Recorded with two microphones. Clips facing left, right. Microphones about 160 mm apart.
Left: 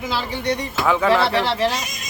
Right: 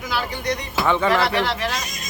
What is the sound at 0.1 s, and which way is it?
Speech, 30° left (ahead or behind).